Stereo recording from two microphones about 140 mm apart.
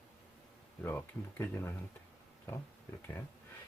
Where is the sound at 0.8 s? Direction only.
15° left (ahead or behind).